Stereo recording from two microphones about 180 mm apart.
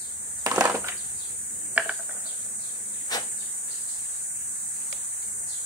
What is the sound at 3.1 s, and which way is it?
Insect, 20° left (ahead or behind).